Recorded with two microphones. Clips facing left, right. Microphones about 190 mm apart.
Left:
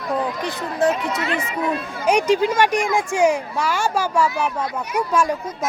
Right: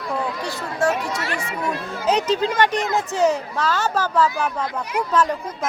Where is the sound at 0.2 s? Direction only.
20° left (ahead or behind).